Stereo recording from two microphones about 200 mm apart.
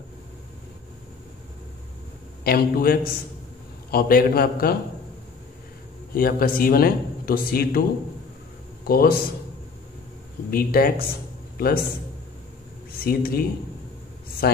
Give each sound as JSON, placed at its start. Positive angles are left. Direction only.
{"t": 2.4, "sound": "speech", "side_deg": 50}
{"t": 6.1, "sound": "speech", "side_deg": 45}
{"t": 8.8, "sound": "speech", "side_deg": 50}
{"t": 10.5, "sound": "a man's voice", "side_deg": 45}
{"t": 13.0, "sound": "speech", "side_deg": 50}
{"t": 14.4, "sound": "speech", "side_deg": 50}